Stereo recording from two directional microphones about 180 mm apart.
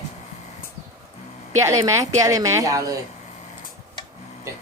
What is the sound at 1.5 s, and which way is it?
A woman's voice, 20° right (ahead or behind).